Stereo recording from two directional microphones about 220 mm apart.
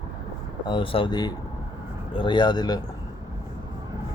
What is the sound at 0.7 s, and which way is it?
Speech, 20° left (ahead or behind).